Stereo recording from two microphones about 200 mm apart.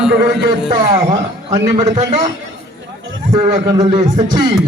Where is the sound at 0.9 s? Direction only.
35° right (ahead or behind).